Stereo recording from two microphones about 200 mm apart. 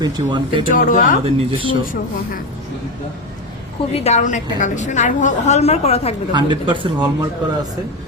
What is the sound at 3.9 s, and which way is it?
A woman's voice, 30° left (ahead or behind).